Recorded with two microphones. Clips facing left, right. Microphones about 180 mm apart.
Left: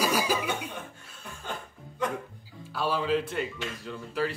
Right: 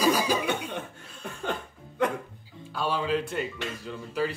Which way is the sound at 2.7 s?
5° left (ahead or behind).